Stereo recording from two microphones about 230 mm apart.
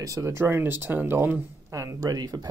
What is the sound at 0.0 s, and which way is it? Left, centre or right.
Speech, centre.